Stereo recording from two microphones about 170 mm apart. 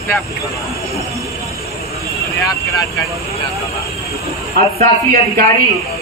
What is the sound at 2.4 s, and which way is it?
Speech, 20° left (ahead or behind).